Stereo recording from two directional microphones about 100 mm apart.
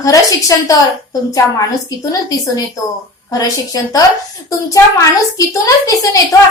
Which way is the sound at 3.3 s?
35° left (ahead or behind).